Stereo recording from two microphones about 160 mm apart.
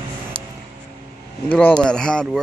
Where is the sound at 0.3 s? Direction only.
35° right (ahead or behind).